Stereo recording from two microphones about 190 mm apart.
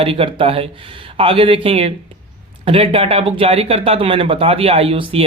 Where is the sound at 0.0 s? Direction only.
30° right (ahead or behind).